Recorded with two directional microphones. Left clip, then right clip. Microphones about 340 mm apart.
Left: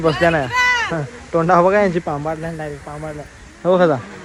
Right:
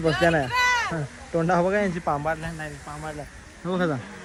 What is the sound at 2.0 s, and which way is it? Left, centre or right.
Speech, right.